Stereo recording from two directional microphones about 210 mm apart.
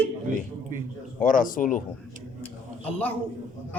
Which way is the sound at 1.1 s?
40° left (ahead or behind).